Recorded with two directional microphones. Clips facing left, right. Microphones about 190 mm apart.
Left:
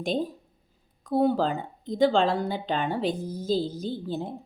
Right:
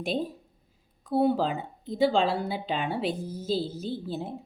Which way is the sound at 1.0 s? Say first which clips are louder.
Left 1 dB; 5° right (ahead or behind).